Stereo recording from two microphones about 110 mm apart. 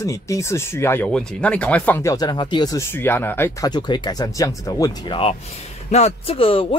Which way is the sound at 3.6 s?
40° left (ahead or behind).